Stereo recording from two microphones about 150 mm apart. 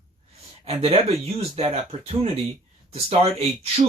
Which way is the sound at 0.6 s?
40° right (ahead or behind).